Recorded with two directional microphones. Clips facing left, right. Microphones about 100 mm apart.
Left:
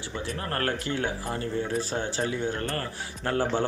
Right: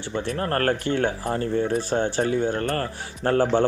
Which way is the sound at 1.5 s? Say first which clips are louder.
Right 6 dB; 55° right (ahead or behind).